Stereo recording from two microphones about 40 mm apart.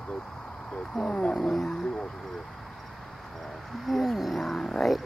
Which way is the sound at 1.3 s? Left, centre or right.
Centre.